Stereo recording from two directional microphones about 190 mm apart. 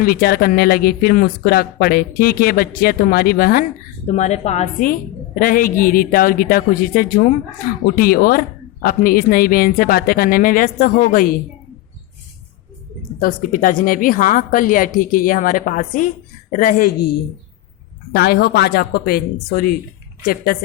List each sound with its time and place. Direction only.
0.0 s speech: 50° left (ahead or behind)
4.0 s speech: 35° left (ahead or behind)
13.1 s speech: 50° left (ahead or behind)
18.1 s a woman's voice: 60° left (ahead or behind)